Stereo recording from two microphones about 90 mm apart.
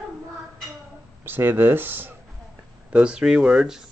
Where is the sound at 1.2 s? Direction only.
25° right (ahead or behind).